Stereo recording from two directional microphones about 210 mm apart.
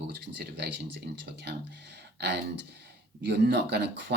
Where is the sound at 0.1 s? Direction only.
55° right (ahead or behind).